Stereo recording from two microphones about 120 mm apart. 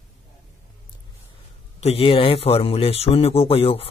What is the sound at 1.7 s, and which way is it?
Speech, 55° left (ahead or behind).